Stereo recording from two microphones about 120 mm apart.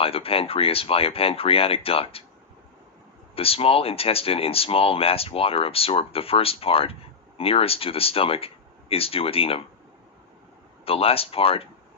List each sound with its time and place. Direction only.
0.0 s speech: 50° left (ahead or behind)
3.3 s speech: 55° left (ahead or behind)
10.8 s speech: 55° left (ahead or behind)